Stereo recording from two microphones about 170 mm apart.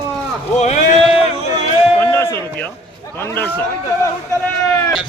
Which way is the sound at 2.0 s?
15° left (ahead or behind).